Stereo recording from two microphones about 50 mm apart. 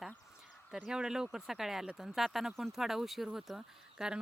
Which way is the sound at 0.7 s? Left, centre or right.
Centre.